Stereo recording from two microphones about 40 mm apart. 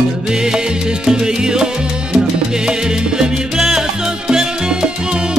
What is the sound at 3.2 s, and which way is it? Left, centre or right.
Salsa music, centre.